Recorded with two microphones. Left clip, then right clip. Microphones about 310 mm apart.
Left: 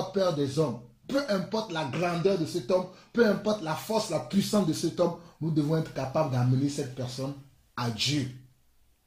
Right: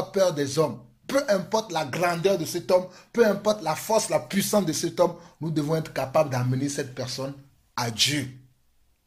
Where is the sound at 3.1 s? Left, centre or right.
Centre.